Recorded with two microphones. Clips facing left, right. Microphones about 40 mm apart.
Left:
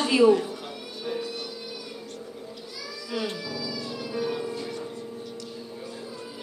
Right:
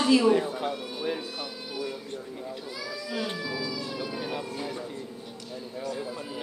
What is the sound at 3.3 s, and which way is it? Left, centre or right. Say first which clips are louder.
Cat: right 1 dB; right.